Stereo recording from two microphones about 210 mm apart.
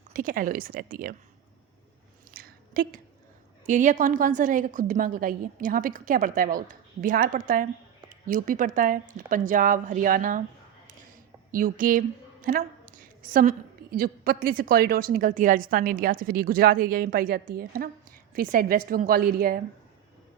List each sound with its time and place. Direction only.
0.1 s a woman's voice: 40° right (ahead or behind)
2.3 s a sound: 45° right (ahead or behind)
3.7 s a woman's voice: 35° right (ahead or behind)
11.5 s a woman's voice: 40° right (ahead or behind)